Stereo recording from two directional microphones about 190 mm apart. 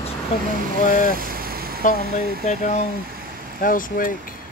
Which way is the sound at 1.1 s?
50° right (ahead or behind).